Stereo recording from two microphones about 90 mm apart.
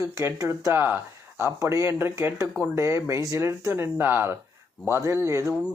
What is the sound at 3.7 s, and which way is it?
Speech, 25° right (ahead or behind).